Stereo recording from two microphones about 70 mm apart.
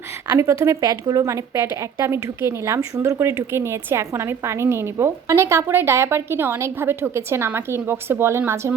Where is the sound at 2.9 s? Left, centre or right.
Right.